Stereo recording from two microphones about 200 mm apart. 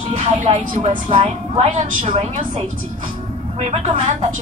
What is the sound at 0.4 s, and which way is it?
A woman's voice, 35° right (ahead or behind).